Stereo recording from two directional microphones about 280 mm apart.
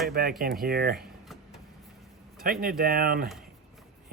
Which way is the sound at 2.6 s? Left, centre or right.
Right.